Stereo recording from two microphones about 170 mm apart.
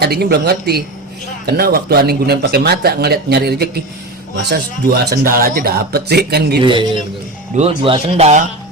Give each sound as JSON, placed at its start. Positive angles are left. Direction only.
{"t": 0.0, "sound": "a man's voice", "side_deg": -70}
{"t": 6.6, "sound": "a man's voice", "side_deg": -30}